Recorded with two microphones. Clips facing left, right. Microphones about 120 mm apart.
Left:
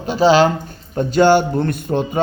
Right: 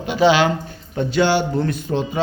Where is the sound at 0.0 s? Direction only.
40° left (ahead or behind).